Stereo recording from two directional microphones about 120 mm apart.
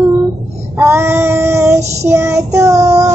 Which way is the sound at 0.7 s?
20° right (ahead or behind).